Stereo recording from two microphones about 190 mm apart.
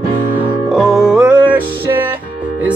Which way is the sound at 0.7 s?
Centre (ahead or behind).